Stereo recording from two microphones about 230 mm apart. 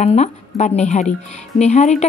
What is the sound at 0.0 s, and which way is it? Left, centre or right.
Speech, left.